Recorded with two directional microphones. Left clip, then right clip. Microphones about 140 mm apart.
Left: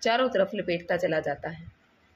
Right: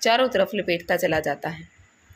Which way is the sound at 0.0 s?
15° right (ahead or behind).